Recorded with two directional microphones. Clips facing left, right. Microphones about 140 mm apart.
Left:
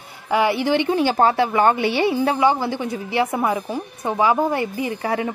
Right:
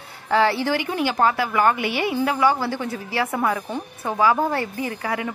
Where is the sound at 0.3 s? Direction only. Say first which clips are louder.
Left 1 dB; 15° left (ahead or behind).